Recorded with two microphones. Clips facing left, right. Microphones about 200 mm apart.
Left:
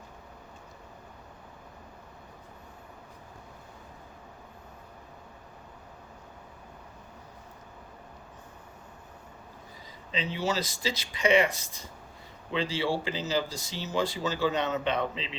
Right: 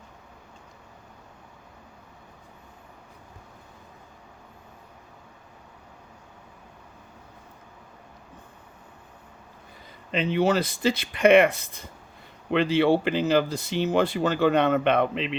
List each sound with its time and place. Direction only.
10.1 s speech: 55° right (ahead or behind)